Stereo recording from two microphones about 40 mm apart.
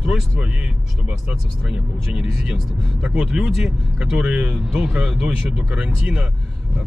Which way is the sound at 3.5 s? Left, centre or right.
Centre.